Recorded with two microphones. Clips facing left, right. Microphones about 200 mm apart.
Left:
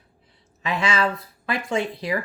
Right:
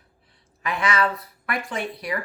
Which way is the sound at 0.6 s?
25° left (ahead or behind).